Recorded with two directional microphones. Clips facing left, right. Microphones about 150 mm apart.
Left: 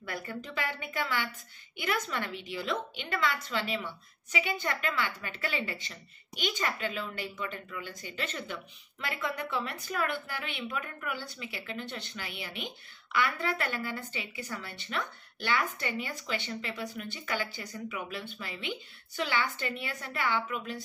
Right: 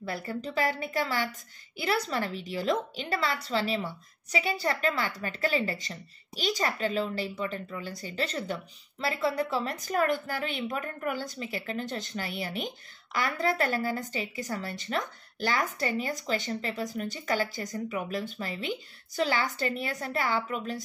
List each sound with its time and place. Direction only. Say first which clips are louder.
0.0 s a woman's voice: right 5 dB; 30° right (ahead or behind)